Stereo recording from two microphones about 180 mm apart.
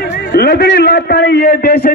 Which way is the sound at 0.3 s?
60° left (ahead or behind).